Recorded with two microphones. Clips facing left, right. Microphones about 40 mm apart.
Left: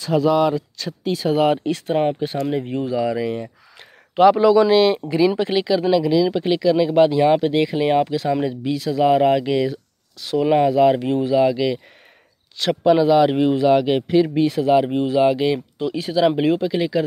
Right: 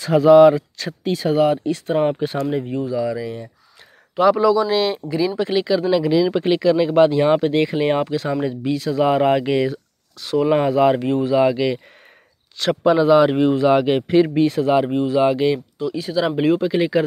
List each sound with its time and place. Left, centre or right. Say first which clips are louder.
0.0 s speech: right 7 dB; centre
2.8 s speech: left 1 dB; left; by 5.9 s centre
5.9 s speech: left 1 dB; centre
10.2 s speech: even; centre
12.6 s speech: right 1 dB; centre
12.9 s speech: right 1 dB; centre
14.9 s speech: right 1 dB; centre
15.1 s speech: even; centre
15.8 s speech: left 5 dB; centre
16.6 s speech: right 2 dB; centre